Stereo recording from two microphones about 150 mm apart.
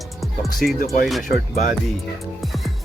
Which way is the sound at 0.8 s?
80° left.